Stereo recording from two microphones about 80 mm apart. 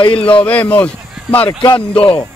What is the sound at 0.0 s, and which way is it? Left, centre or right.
Speech, left.